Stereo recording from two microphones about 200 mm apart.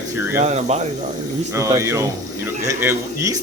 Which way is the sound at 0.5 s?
35° right (ahead or behind).